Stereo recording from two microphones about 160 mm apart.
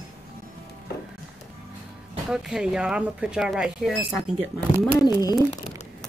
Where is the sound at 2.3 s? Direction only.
5° right (ahead or behind).